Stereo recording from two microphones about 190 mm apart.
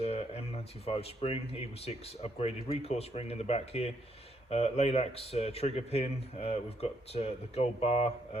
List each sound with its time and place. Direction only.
0.0 s speech: 35° left (ahead or behind)